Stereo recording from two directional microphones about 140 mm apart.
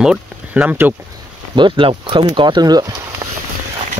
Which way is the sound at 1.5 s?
35° right (ahead or behind).